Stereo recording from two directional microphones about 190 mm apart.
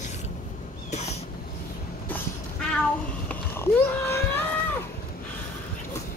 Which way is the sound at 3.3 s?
10° left (ahead or behind).